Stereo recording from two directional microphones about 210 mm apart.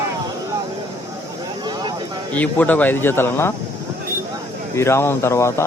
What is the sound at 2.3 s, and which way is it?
A man's voice, 5° left (ahead or behind).